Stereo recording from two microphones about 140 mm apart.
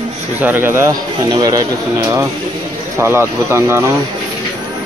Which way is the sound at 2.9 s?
15° right (ahead or behind).